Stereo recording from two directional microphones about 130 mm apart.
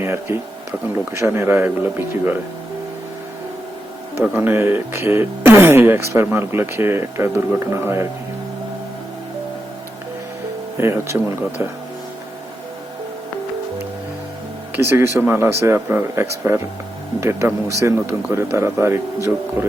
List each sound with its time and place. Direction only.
0.0 s speech: 20° right (ahead or behind)
4.2 s speech: 15° right (ahead or behind)
10.8 s speech: 20° right (ahead or behind)
14.8 s speech: 20° right (ahead or behind)